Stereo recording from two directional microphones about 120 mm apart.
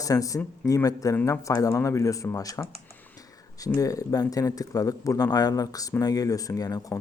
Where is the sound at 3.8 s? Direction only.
30° left (ahead or behind).